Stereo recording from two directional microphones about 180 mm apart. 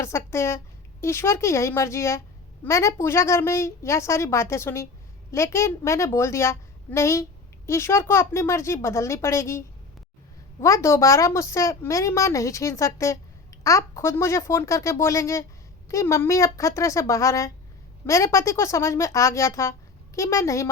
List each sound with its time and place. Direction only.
0.0 s a woman's voice: 15° left (ahead or behind)